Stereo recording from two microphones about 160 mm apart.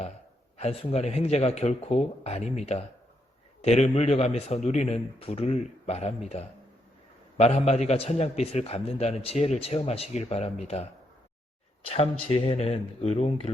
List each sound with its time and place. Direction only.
0.5 s a man's voice: 40° left (ahead or behind)
12.3 s a man's voice: 40° left (ahead or behind)